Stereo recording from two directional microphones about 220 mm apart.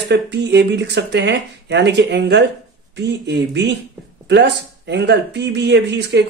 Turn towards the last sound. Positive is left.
turn(degrees=-50)  # may be behind; listen again after turning